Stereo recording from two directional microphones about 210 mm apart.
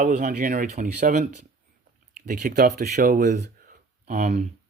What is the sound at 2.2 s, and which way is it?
Speech, 40° right (ahead or behind).